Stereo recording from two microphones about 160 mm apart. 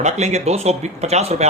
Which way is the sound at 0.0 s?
45° right (ahead or behind).